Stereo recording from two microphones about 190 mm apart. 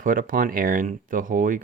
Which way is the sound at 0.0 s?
45° right (ahead or behind).